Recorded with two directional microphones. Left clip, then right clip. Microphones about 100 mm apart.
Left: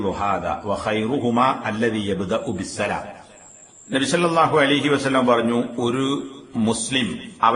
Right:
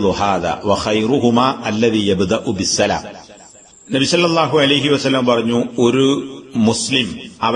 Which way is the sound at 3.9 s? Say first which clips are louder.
Right 5 dB; 25° right (ahead or behind).